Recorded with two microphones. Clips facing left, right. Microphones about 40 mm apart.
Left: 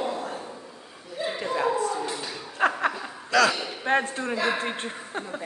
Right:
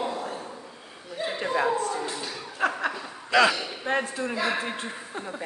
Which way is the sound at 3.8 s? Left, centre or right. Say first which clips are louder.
Left 3 dB; left.